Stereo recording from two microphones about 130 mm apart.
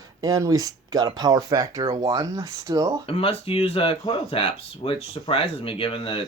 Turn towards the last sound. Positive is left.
turn(degrees=45)  # may be behind; listen again after turning